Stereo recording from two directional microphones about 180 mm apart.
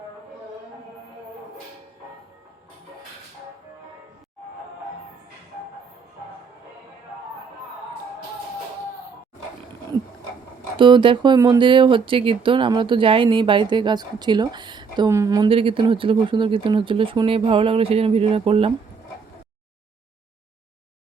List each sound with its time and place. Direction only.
10.8 s speech: 25° right (ahead or behind)
15.4 s speech: 30° right (ahead or behind)